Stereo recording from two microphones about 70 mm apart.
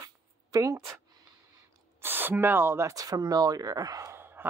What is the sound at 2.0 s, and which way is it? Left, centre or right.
Speech, right.